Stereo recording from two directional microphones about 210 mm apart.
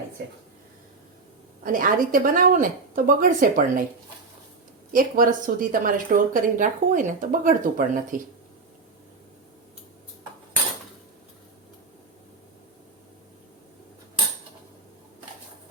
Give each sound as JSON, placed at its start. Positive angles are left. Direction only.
{"t": 1.6, "sound": "a woman's voice", "side_deg": -40}
{"t": 4.9, "sound": "a woman's voice", "side_deg": -40}